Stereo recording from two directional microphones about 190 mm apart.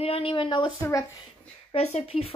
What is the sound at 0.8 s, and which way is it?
Speech, 15° left (ahead or behind).